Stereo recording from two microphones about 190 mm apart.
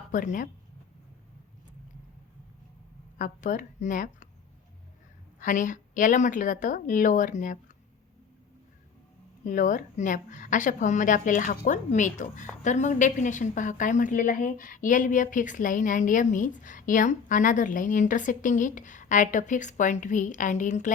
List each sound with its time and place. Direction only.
0.1 s a woman's voice: 40° left (ahead or behind)
3.2 s a woman's voice: 40° left (ahead or behind)
5.4 s a woman's voice: 40° left (ahead or behind)
9.4 s a woman's voice: 45° left (ahead or behind)